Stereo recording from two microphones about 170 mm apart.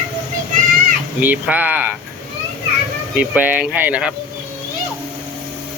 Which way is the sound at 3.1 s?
10° right (ahead or behind).